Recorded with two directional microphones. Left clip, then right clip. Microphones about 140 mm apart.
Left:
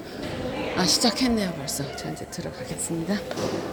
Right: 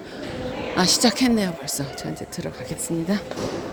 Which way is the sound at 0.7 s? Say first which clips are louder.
Right 3 dB; 65° right (ahead or behind).